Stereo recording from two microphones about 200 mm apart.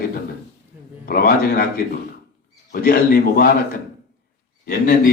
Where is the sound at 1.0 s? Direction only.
50° left (ahead or behind).